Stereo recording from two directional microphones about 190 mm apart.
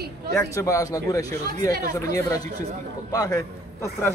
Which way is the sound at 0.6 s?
15° left (ahead or behind).